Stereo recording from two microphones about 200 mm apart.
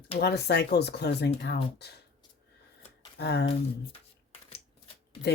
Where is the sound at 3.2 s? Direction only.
55° left (ahead or behind).